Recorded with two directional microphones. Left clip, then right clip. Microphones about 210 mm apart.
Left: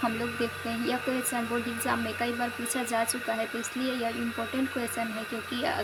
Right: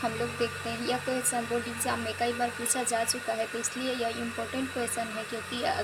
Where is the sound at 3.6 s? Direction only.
20° left (ahead or behind).